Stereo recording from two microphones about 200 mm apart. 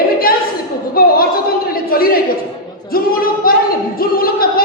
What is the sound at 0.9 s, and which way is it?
Singing, 50° left (ahead or behind).